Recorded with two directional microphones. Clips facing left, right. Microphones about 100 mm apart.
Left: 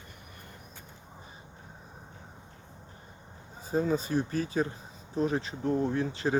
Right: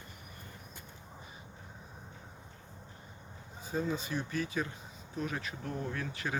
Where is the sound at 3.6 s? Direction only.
40° left (ahead or behind).